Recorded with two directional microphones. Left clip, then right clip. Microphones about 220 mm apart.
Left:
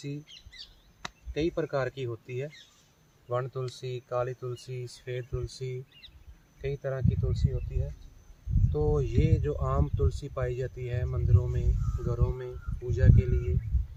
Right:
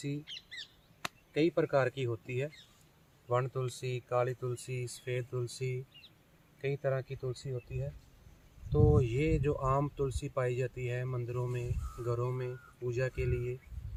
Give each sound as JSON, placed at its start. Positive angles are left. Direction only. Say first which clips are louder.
{"t": 0.3, "sound": "speech", "louder": "right 4 dB", "side_deg": -10}
{"t": 1.0, "sound": "speech", "louder": "even", "side_deg": -30}